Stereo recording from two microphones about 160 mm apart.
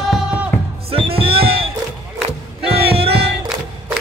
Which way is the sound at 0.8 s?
35° right (ahead or behind).